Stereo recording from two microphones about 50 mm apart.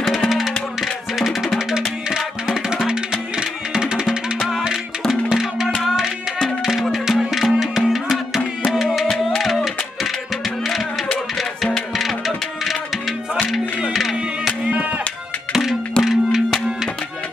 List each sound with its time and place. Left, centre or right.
0.0 s music: centre
2.0 s music: centre
9.1 s music: centre
12.0 s music: centre
16.0 s music: centre